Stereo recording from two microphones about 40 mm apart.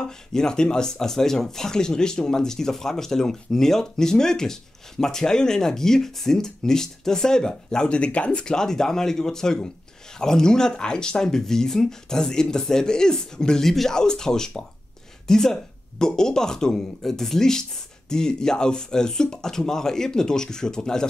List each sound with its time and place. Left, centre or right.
0.3 s speech: centre; by 8.5 s left
8.5 s speech: centre